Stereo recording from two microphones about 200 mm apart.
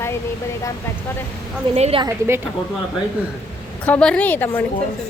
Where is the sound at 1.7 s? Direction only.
30° right (ahead or behind).